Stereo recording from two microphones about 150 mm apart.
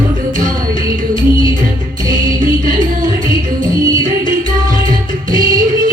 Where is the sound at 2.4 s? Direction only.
60° right (ahead or behind).